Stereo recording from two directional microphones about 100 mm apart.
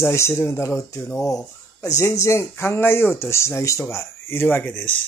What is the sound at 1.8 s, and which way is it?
Speech, 30° left (ahead or behind).